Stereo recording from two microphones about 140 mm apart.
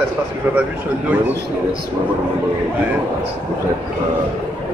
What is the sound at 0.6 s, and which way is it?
Speech, 10° right (ahead or behind).